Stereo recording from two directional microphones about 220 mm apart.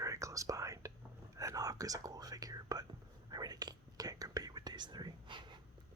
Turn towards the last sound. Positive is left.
turn(degrees=-20)  # may be behind; listen again after turning